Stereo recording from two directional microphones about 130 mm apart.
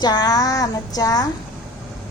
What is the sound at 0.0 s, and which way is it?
Speech, 30° left (ahead or behind).